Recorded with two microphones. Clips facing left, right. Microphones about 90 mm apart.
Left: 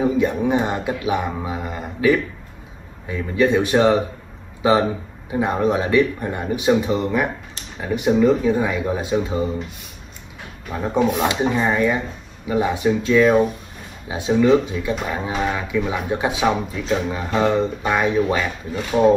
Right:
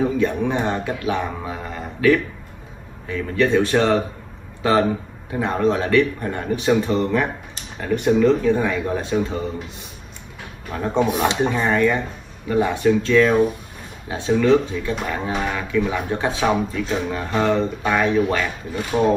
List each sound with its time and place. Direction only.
0.0 s speech: 15° left (ahead or behind)
10.7 s speech: 5° left (ahead or behind)